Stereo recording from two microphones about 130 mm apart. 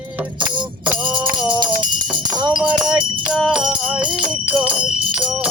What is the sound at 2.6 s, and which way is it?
Music, 5° right (ahead or behind).